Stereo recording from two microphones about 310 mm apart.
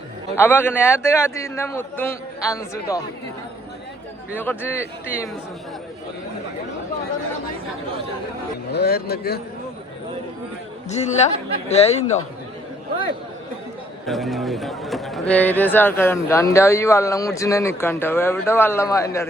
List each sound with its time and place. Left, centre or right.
0.3 s speech: centre
4.4 s speech: centre
8.7 s a man's voice: left
10.8 s speech: left
14.1 s speech: centre